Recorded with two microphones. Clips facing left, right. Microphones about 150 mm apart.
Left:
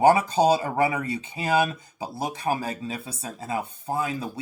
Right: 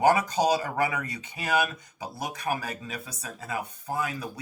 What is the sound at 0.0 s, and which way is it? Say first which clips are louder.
Speech: left 4 dB; 30° left (ahead or behind).